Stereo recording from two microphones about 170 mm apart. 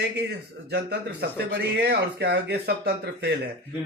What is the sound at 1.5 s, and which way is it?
Speech, 80° right.